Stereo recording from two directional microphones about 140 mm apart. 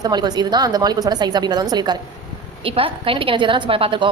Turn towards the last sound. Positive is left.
turn(degrees=-40)  # may be behind; listen again after turning